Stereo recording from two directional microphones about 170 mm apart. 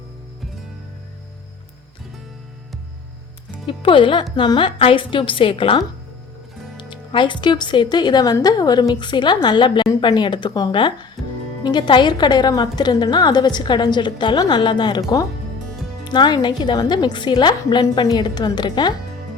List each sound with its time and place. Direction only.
3.7 s speech: 30° left (ahead or behind)
11.2 s music: centre (ahead or behind)
11.6 s speech: 25° left (ahead or behind)
16.0 s speech: 25° left (ahead or behind)